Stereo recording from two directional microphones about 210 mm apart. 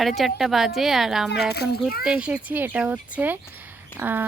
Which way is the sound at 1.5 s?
50° left (ahead or behind).